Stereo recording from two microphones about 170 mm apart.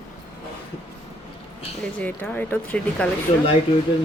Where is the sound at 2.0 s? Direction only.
10° left (ahead or behind).